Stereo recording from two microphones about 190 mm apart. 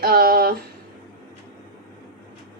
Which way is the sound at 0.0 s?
55° right (ahead or behind).